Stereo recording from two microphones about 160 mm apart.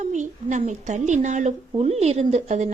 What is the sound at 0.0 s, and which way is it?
A woman's voice, 50° right (ahead or behind).